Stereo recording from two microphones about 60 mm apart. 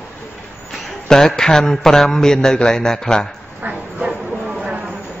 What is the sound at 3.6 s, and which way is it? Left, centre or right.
Bow-wow, right.